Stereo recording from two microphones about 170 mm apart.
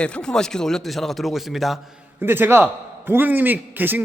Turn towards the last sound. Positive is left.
turn(degrees=-10)  # may be behind; listen again after turning